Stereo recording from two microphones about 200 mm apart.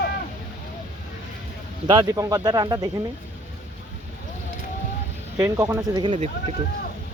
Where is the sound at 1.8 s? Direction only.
20° right (ahead or behind).